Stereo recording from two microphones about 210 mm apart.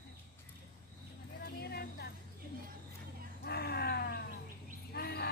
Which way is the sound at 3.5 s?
50° left (ahead or behind).